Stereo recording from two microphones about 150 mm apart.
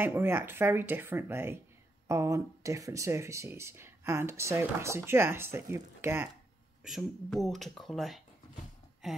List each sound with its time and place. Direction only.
0.0 s speech: 15° right (ahead or behind)
6.8 s speech: centre (ahead or behind)
9.0 s a sound: 5° right (ahead or behind)